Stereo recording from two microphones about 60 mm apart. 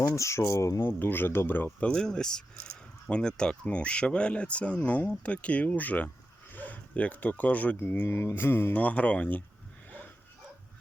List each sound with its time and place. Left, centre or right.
0.2 s speech: left
0.8 s speech: left
1.9 s speech: centre; by 8.0 s left
8.0 s speech: left
8.7 s speech: left